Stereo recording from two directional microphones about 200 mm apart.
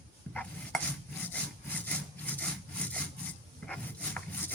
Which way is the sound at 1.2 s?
10° left (ahead or behind).